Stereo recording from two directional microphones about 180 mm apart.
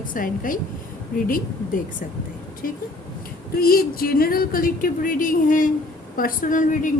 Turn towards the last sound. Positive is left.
turn(degrees=45)  # may be behind; listen again after turning